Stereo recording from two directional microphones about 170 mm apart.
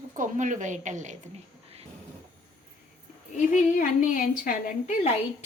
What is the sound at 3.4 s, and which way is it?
A woman's voice, 50° left (ahead or behind).